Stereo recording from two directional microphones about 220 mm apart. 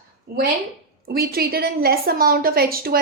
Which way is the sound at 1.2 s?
45° right (ahead or behind).